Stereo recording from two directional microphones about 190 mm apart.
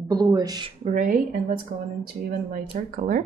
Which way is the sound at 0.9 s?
45° right (ahead or behind).